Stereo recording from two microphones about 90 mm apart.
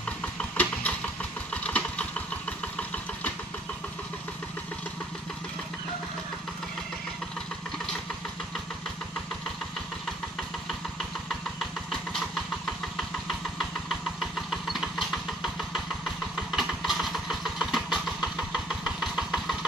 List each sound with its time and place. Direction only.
0.2 s engine: 15° left (ahead or behind)
13.6 s engine: centre (ahead or behind)
16.5 s vehicle: centre (ahead or behind)